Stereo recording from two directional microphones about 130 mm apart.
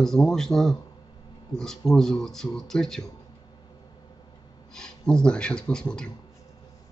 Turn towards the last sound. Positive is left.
turn(degrees=5)  # may be behind; listen again after turning